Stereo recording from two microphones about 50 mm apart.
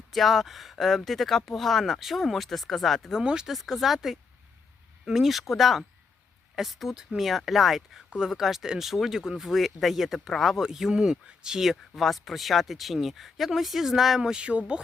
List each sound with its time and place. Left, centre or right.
0.1 s speech: centre
3.2 s speech: centre
10.6 s speech: centre
14.2 s speech: centre